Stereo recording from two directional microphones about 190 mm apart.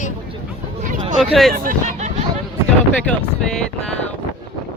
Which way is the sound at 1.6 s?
40° right (ahead or behind).